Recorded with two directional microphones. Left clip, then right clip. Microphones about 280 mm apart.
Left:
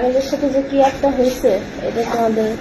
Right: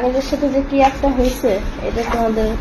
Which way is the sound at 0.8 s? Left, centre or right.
Right.